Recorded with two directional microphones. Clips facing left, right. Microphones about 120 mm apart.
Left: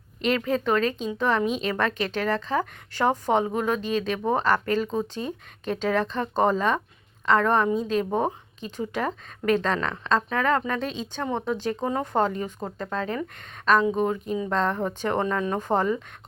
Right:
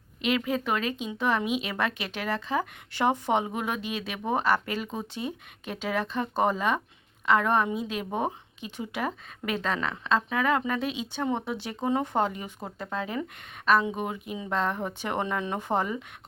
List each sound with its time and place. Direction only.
0.2 s speech: 10° right (ahead or behind)